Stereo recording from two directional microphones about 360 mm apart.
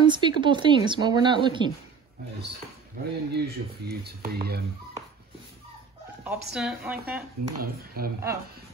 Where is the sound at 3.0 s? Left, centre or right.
Right.